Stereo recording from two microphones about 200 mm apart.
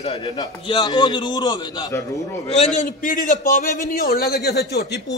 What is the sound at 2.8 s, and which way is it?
A man's voice, 40° left (ahead or behind).